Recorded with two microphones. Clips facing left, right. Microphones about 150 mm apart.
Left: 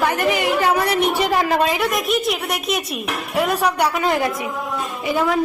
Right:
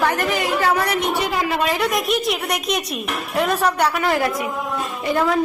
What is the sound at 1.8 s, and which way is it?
A woman's voice, centre (ahead or behind).